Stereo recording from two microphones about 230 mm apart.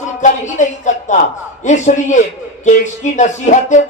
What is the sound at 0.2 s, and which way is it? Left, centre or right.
Speech, left.